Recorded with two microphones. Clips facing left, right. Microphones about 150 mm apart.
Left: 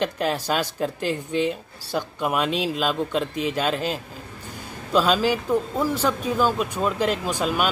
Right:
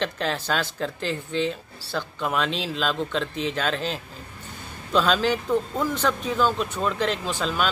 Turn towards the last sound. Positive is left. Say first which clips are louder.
# left 2 dB
turn(degrees=10)  # may be behind; listen again after turning